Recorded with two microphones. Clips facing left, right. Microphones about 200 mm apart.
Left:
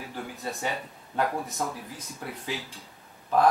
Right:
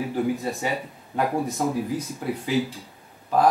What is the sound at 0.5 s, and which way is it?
Speech, 5° right (ahead or behind).